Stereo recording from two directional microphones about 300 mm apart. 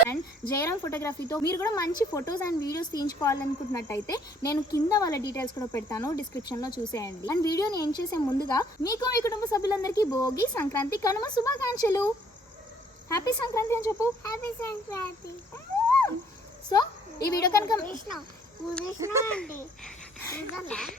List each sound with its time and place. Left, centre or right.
0.1 s speech: centre
13.1 s speech: centre
15.5 s a sound: centre
17.3 s speech: centre
18.9 s speech: centre
19.2 s a child's voice: centre